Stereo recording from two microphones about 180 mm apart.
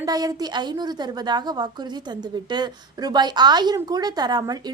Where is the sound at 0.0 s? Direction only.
20° right (ahead or behind).